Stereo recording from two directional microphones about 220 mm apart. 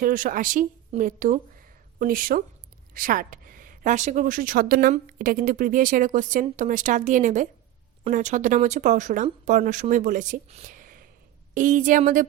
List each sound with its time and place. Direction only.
0.0 s speech: 40° right (ahead or behind)